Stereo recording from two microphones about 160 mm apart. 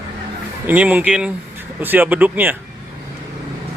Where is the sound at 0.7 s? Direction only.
10° right (ahead or behind).